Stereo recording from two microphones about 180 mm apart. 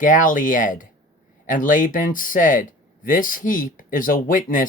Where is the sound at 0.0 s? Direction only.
45° left (ahead or behind).